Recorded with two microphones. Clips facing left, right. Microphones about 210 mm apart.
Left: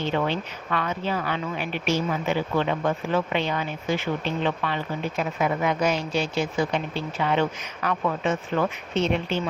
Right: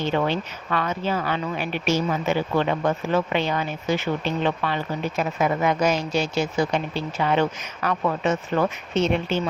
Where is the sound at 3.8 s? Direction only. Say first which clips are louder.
Right 2 dB; 75° right (ahead or behind).